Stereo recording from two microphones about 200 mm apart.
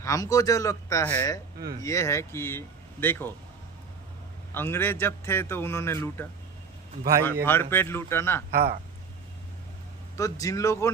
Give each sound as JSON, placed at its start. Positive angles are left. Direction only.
{"t": 0.0, "sound": "a man's voice", "side_deg": 15}
{"t": 4.5, "sound": "a man's voice", "side_deg": 10}
{"t": 7.4, "sound": "a man's voice", "side_deg": 10}
{"t": 8.5, "sound": "speech", "side_deg": -50}
{"t": 10.2, "sound": "a man's voice", "side_deg": 15}